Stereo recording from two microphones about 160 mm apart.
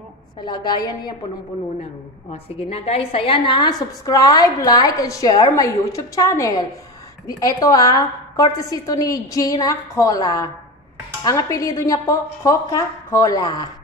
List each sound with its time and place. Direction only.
0.4 s a woman's voice: 25° left (ahead or behind)
2.3 s a woman's voice: 40° left (ahead or behind)